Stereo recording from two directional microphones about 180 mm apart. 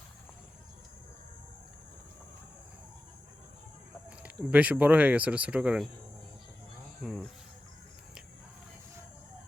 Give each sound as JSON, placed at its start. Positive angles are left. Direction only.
{"t": 4.5, "sound": "speech", "side_deg": -10}
{"t": 7.0, "sound": "cricket", "side_deg": 0}